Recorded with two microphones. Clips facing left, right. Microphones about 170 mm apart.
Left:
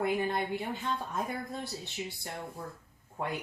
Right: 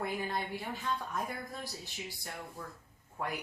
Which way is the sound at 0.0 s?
25° left (ahead or behind).